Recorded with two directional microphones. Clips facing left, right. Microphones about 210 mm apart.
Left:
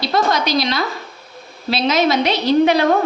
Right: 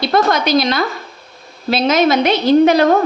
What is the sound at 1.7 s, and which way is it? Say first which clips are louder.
A woman's voice: right 3 dB; 50° right (ahead or behind).